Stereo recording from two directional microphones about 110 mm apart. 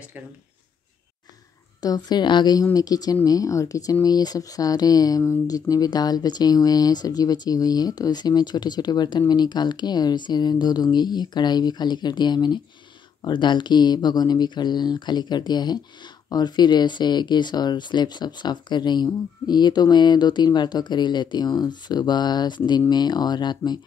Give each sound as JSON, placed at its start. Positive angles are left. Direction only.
{"t": 1.8, "sound": "speech", "side_deg": 40}